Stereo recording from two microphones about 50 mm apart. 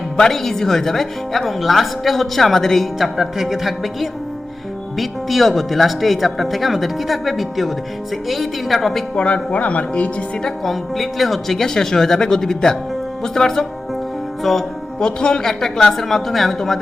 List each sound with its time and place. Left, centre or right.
0.2 s speech: centre
9.1 s speech: left
10.4 s speech: centre
14.9 s speech: centre